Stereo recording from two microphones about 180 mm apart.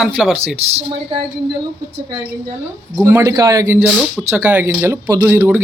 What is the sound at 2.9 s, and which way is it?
Speech, 10° right (ahead or behind).